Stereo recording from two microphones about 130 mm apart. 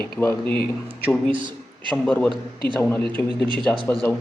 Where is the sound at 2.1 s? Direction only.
10° left (ahead or behind).